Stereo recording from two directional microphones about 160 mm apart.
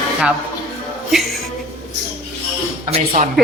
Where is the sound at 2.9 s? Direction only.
45° right (ahead or behind).